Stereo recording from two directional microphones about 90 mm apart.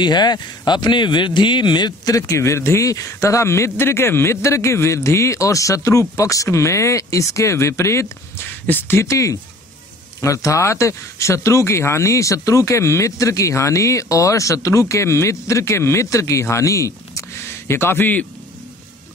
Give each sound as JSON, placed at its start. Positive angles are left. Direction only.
{"t": 0.0, "sound": "speech", "side_deg": 55}